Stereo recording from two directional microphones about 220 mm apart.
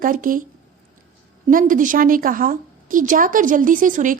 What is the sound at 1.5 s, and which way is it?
A woman's voice, 40° right (ahead or behind).